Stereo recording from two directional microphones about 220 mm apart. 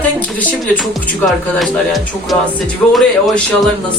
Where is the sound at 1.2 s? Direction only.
Centre (ahead or behind).